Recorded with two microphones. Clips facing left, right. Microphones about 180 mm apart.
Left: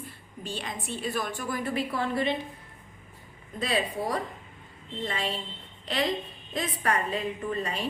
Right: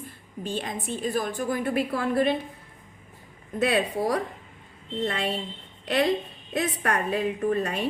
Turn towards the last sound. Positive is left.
turn(degrees=-65)  # may be behind; listen again after turning